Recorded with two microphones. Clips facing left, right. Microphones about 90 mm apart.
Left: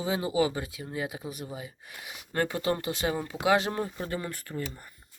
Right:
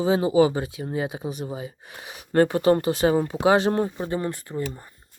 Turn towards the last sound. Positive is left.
turn(degrees=-25)  # may be behind; listen again after turning